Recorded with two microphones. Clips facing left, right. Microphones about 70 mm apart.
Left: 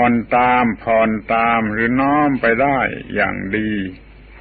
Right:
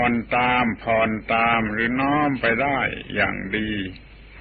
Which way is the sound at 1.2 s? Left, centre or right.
Centre.